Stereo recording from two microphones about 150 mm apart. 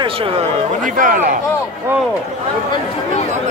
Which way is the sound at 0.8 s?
65° right (ahead or behind).